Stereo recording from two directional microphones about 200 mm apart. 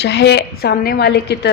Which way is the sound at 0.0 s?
60° left (ahead or behind).